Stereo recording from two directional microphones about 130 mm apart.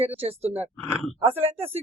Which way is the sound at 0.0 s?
50° right (ahead or behind).